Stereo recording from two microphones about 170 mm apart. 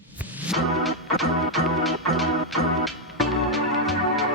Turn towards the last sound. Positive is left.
turn(degrees=0)  # may be behind; listen again after turning